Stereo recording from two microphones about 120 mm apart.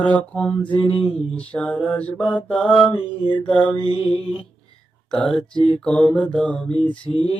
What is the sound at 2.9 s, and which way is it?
Mantra, 40° left (ahead or behind).